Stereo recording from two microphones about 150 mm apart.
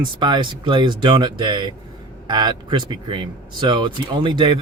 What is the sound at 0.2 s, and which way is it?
Speech, 30° right (ahead or behind).